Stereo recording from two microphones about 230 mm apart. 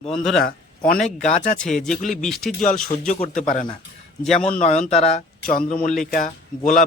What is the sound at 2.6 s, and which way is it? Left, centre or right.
Speech, left.